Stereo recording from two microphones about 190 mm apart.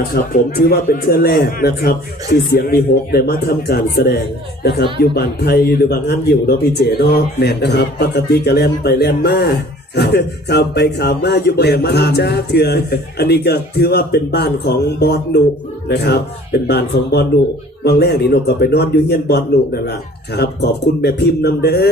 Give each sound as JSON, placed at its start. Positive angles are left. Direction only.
{"t": 0.1, "sound": "speech", "side_deg": 50}